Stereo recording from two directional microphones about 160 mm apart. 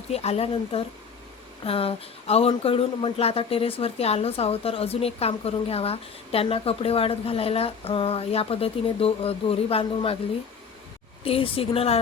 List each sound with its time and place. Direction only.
0.1 s speech: 40° left (ahead or behind)
11.2 s speech: 35° left (ahead or behind)